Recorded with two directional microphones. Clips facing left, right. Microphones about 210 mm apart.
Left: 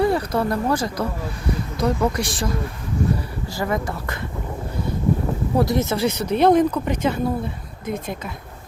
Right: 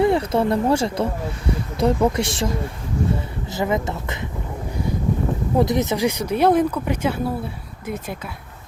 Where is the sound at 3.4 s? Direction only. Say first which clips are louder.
Right 2 dB; 20° right (ahead or behind).